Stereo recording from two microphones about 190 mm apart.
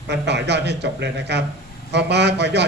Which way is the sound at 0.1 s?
65° right (ahead or behind).